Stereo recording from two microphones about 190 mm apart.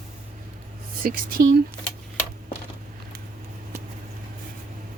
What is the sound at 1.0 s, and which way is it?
Speech, 50° right (ahead or behind).